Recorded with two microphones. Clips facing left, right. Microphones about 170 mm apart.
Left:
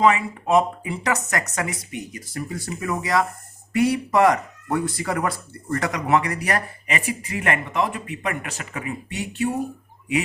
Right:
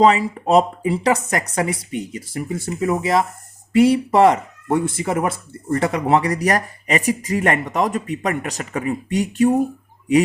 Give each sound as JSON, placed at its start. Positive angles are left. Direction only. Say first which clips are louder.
{"t": 0.0, "sound": "speech", "louder": "right 4 dB", "side_deg": -35}